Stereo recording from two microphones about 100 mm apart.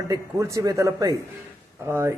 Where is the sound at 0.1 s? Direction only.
30° right (ahead or behind).